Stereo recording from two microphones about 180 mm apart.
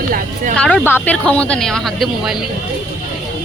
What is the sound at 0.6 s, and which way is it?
Speech, 5° left (ahead or behind).